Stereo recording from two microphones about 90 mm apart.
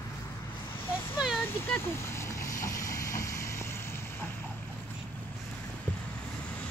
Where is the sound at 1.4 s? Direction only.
25° left (ahead or behind).